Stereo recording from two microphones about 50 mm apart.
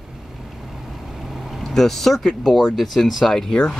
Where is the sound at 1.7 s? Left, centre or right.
Centre.